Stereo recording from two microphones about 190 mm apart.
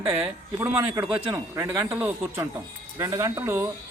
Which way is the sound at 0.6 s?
10° right (ahead or behind).